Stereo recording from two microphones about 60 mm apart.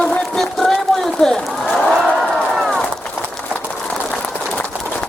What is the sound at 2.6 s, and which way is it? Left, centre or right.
Run, centre.